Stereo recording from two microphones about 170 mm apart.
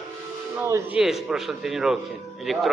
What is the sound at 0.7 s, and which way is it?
Speech, 15° right (ahead or behind).